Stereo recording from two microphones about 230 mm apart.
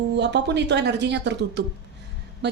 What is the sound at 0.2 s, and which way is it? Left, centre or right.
A woman's voice, right.